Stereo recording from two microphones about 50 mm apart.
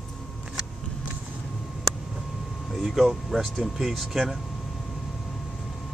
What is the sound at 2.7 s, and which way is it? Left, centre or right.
Vehicle, centre.